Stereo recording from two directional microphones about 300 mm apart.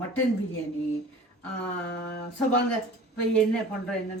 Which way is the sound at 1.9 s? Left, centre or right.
Left.